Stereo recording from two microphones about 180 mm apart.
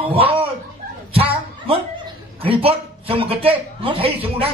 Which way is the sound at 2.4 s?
30° right (ahead or behind).